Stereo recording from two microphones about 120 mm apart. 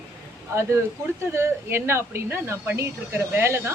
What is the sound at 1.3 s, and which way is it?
A woman's voice, 20° right (ahead or behind).